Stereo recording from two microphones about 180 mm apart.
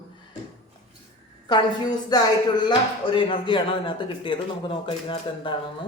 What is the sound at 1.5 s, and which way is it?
Speech, 25° left (ahead or behind).